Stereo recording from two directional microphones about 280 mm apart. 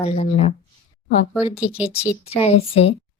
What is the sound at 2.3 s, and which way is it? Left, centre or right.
Speech, left.